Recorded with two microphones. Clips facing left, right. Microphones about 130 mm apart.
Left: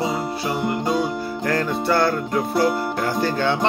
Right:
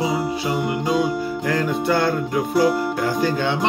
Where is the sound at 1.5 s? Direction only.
15° right (ahead or behind).